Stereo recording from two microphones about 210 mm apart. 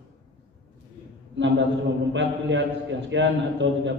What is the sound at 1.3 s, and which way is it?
A man's voice, 60° right (ahead or behind).